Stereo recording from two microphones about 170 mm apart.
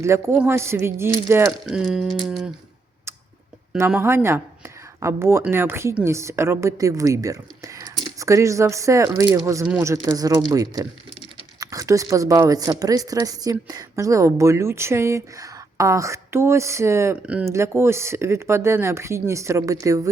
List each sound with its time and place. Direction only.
0.0 s a woman's voice: 15° right (ahead or behind)
1.6 s speech: centre (ahead or behind)
3.8 s a woman's voice: 10° right (ahead or behind)